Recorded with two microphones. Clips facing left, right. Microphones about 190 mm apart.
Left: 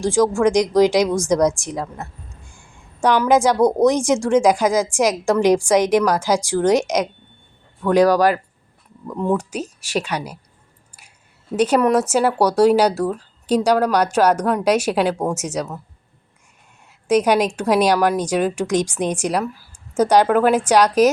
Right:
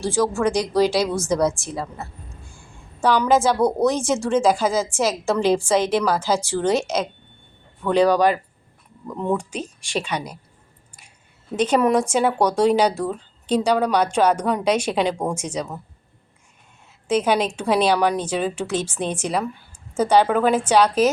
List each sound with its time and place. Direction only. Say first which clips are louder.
0.0 s a woman's voice: left 4 dB; 15° left (ahead or behind)
3.2 s a woman's voice: left 3 dB; 15° left (ahead or behind)
9.0 s a woman's voice: left 3 dB; 5° right (ahead or behind)
11.5 s a woman's voice: left 2 dB; 10° left (ahead or behind)
17.1 s a woman's voice: left 4 dB; 10° left (ahead or behind)